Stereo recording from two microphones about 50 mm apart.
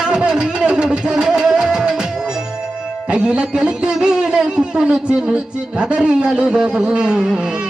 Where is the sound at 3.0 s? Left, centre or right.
Centre.